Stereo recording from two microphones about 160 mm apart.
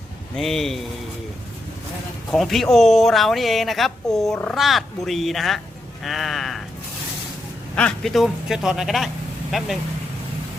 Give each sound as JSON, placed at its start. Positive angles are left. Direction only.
{"t": 0.3, "sound": "speech", "side_deg": 0}
{"t": 2.3, "sound": "speech", "side_deg": 0}
{"t": 7.8, "sound": "speech", "side_deg": 5}